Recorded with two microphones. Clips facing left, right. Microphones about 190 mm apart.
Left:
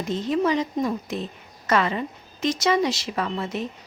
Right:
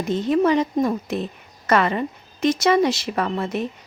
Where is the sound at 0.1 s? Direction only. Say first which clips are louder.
Right 4 dB; 55° right (ahead or behind).